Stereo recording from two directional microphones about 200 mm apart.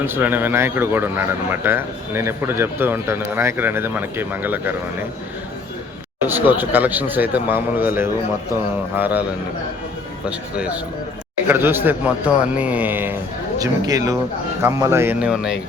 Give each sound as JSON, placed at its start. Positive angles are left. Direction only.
{"t": 0.0, "sound": "speech", "side_deg": -10}
{"t": 6.2, "sound": "speech", "side_deg": -10}
{"t": 10.2, "sound": "speech", "side_deg": -5}